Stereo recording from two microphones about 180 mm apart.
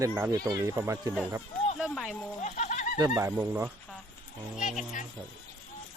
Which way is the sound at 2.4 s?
40° left (ahead or behind).